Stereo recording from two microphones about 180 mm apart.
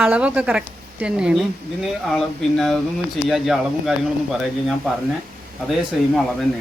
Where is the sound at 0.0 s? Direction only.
5° right (ahead or behind).